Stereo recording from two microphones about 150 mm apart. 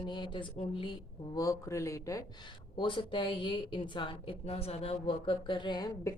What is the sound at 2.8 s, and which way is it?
A woman's voice, 35° left (ahead or behind).